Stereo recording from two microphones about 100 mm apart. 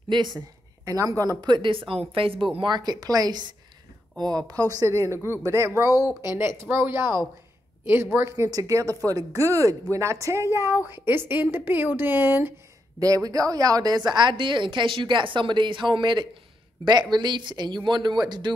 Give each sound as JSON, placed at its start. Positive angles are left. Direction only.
{"t": 0.1, "sound": "a woman's voice", "side_deg": -50}
{"t": 0.8, "sound": "a woman's voice", "side_deg": -35}
{"t": 2.5, "sound": "a woman's voice", "side_deg": -50}
{"t": 13.0, "sound": "a woman's voice", "side_deg": -35}